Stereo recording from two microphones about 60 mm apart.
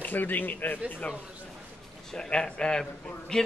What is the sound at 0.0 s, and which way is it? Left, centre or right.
Speech, left.